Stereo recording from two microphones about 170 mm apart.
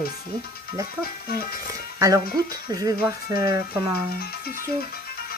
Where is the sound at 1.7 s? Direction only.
20° right (ahead or behind).